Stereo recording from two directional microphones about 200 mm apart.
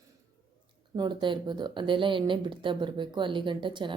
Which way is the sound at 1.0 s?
20° right (ahead or behind).